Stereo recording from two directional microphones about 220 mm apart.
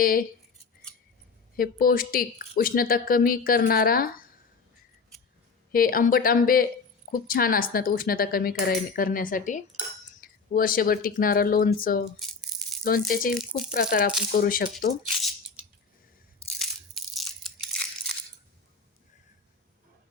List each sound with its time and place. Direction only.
0.0 s a woman's voice: 40° left (ahead or behind)
1.5 s a woman's voice: 40° left (ahead or behind)
5.7 s a woman's voice: 40° left (ahead or behind)
12.2 s rattle: centre (ahead or behind)
12.8 s a woman's voice: 40° left (ahead or behind)
16.6 s crushing: centre (ahead or behind)